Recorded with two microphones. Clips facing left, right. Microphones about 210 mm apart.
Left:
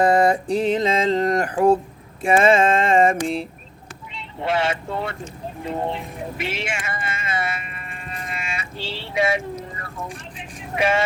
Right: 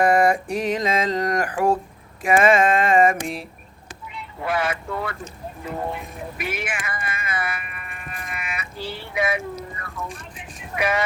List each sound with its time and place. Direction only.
0.0 s music: 25° left (ahead or behind)
4.1 s speech: 25° left (ahead or behind)